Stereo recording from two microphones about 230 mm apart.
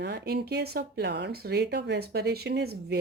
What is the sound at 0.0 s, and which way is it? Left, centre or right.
Speech, right.